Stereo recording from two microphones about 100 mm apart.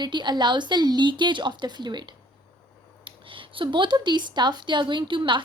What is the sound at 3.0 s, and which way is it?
Speech, 60° right (ahead or behind).